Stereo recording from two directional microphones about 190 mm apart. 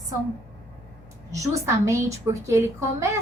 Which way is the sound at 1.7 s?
15° right (ahead or behind).